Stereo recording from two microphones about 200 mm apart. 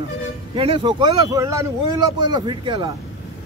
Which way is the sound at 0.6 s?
25° right (ahead or behind).